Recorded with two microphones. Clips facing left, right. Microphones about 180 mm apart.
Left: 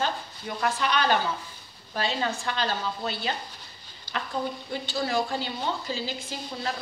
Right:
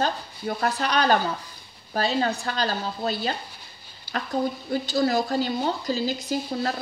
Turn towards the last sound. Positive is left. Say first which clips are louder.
# right 7 dB
turn(degrees=-40)  # may be behind; listen again after turning